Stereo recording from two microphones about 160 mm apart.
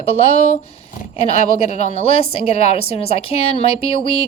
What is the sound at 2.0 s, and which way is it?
A woman's voice, 40° left (ahead or behind).